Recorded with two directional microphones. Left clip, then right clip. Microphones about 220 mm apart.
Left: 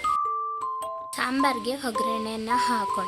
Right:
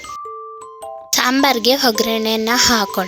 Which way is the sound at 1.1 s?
35° right (ahead or behind).